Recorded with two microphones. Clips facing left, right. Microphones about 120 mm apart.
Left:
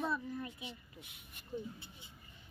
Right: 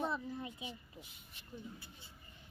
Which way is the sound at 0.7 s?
65° left (ahead or behind).